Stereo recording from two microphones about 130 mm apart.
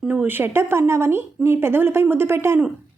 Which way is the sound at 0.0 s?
15° right (ahead or behind).